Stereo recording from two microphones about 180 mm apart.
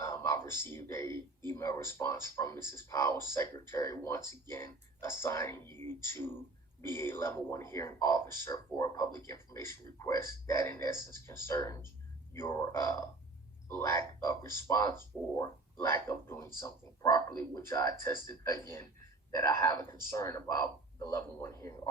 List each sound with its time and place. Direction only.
0.0 s speech: 15° left (ahead or behind)